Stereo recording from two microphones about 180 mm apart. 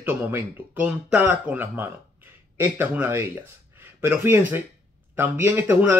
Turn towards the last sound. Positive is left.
turn(degrees=-10)  # may be behind; listen again after turning